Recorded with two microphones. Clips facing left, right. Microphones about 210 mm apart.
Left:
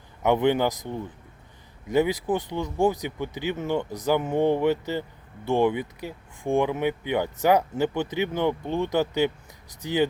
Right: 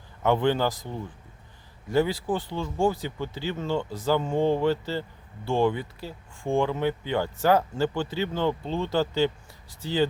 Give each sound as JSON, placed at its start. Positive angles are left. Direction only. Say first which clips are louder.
{"t": 0.2, "sound": "speech", "louder": "left 2 dB", "side_deg": 15}